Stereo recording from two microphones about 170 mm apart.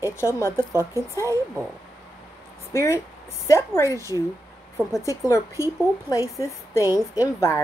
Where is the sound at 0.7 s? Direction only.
15° right (ahead or behind).